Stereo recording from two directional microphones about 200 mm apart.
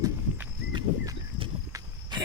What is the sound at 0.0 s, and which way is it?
Horse, 20° right (ahead or behind).